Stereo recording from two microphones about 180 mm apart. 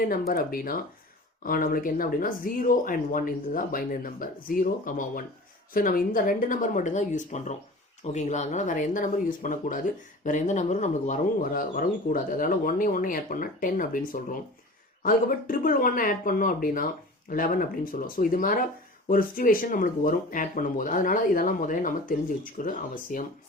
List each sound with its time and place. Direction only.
0.0 s speech: 55° left (ahead or behind)